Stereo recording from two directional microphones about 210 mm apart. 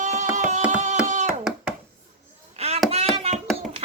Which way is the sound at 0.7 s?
35° right (ahead or behind).